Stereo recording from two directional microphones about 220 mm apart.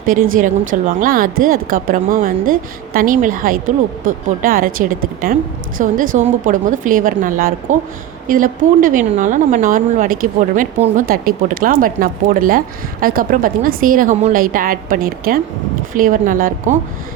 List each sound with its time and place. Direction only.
0.0 s speech: 40° right (ahead or behind)